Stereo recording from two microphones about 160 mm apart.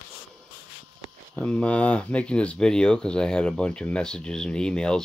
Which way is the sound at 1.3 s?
5° left (ahead or behind).